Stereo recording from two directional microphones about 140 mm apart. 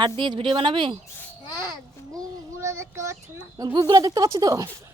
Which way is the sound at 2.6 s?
20° right (ahead or behind).